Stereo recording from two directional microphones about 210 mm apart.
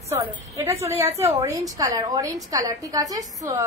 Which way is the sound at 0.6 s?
15° right (ahead or behind).